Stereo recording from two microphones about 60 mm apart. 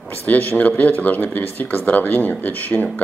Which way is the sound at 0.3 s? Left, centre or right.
Left.